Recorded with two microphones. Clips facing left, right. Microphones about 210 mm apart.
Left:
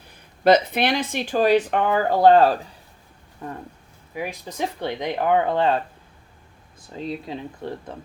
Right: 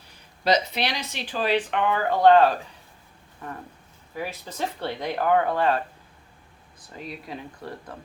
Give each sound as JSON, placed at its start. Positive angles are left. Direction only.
{"t": 0.1, "sound": "speech", "side_deg": 55}
{"t": 4.1, "sound": "speech", "side_deg": 15}
{"t": 6.9, "sound": "speech", "side_deg": 25}